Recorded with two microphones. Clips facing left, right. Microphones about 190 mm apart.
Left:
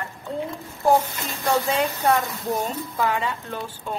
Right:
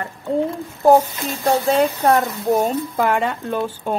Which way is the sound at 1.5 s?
40° right (ahead or behind).